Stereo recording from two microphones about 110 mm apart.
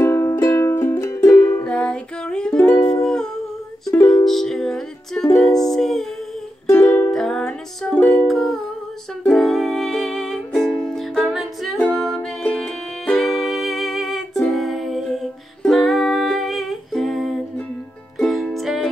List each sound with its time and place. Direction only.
0.0 s music: 25° left (ahead or behind)
1.6 s music: 10° left (ahead or behind)
8.3 s music: centre (ahead or behind)